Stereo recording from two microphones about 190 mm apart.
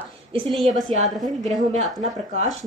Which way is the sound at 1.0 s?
Centre (ahead or behind).